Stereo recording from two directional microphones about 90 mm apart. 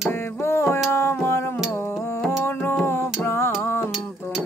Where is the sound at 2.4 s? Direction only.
20° left (ahead or behind).